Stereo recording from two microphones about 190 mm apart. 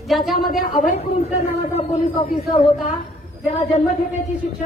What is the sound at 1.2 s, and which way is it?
A man's voice, 35° left (ahead or behind).